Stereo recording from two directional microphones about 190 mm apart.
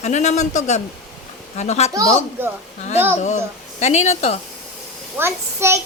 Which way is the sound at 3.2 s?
40° left (ahead or behind).